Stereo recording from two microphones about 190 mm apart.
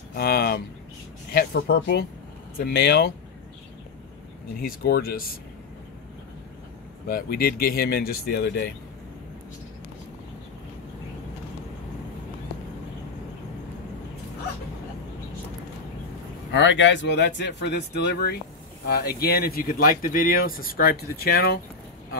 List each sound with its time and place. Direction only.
0.1 s speech: 55° left (ahead or behind)
4.6 s speech: 50° left (ahead or behind)
7.1 s speech: 50° left (ahead or behind)
16.5 s speech: 70° left (ahead or behind); by 21.5 s 55° left (ahead or behind)